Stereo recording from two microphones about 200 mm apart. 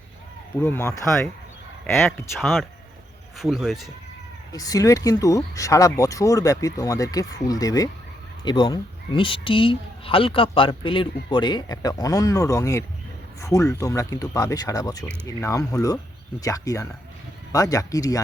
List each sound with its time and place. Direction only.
0.6 s speech: 10° left (ahead or behind)
2.3 s speech: centre (ahead or behind)
4.5 s speech: 15° left (ahead or behind)